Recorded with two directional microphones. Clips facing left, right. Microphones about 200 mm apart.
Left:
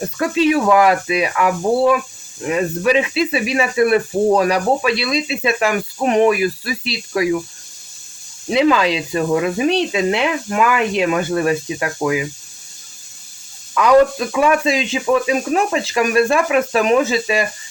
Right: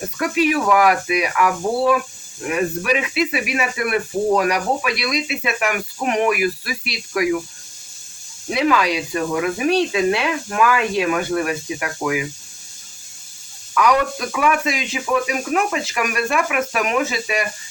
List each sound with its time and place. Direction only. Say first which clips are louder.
0.2 s speech: left 3 dB; 25° left (ahead or behind)
8.4 s speech: left 4 dB; 25° left (ahead or behind)
13.7 s speech: left 6 dB; 25° left (ahead or behind)